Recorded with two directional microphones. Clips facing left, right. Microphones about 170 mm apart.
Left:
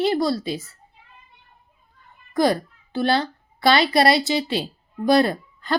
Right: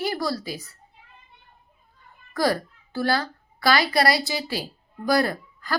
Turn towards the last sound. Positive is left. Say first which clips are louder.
# left 3 dB
turn(degrees=25)  # may be behind; listen again after turning